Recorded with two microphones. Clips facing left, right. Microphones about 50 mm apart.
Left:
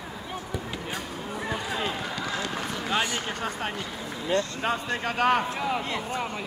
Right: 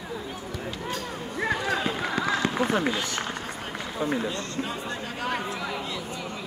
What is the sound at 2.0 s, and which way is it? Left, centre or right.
Run, right.